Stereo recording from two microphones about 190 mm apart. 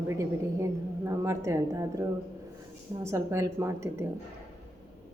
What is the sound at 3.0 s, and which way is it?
A woman's voice, 15° right (ahead or behind).